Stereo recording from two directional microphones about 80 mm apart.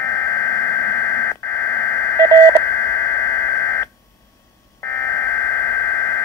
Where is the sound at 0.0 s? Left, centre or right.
Left.